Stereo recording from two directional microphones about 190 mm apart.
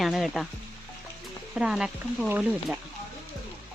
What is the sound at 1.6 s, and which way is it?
Speech, 5° right (ahead or behind).